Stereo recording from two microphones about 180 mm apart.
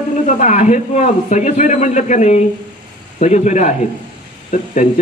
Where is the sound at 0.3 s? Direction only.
40° left (ahead or behind).